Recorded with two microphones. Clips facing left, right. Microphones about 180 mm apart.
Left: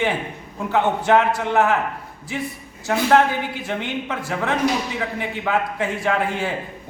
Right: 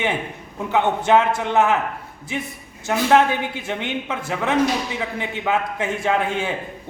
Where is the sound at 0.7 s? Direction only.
20° right (ahead or behind).